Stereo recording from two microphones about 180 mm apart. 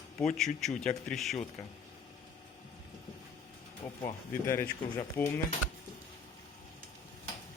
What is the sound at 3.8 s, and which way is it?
A man's voice, 15° left (ahead or behind).